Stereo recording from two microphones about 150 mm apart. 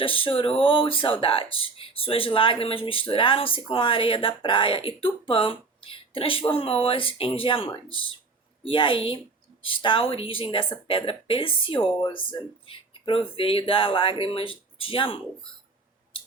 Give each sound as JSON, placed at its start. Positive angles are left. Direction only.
{"t": 0.0, "sound": "speech", "side_deg": 35}